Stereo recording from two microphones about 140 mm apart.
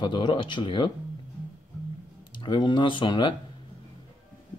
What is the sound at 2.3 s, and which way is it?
Speech, 35° left (ahead or behind).